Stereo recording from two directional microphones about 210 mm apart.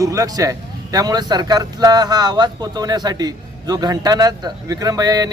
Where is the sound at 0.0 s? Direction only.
15° right (ahead or behind).